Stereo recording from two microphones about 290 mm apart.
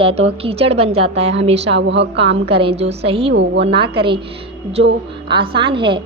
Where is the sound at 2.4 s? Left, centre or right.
Centre.